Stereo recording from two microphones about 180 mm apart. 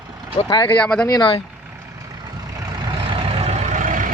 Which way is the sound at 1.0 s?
25° left (ahead or behind).